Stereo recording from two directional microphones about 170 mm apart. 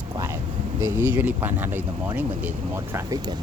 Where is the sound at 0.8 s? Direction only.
15° right (ahead or behind).